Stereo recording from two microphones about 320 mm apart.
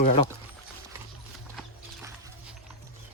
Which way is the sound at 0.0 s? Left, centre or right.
Left.